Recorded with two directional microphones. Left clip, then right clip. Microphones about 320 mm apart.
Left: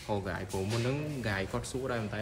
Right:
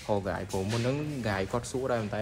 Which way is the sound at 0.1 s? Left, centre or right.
Centre.